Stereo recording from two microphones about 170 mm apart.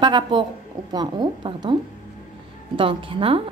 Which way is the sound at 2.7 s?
30° right (ahead or behind).